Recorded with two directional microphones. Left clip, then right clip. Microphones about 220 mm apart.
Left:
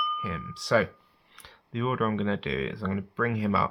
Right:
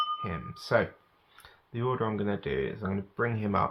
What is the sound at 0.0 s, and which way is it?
Speech, 15° left (ahead or behind).